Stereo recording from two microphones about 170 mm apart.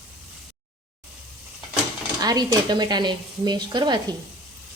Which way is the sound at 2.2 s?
20° right (ahead or behind).